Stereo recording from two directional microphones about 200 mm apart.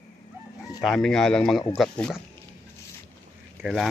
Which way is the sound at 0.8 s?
Centre (ahead or behind).